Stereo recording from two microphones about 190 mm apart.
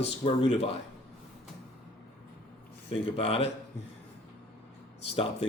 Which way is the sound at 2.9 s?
30° left (ahead or behind).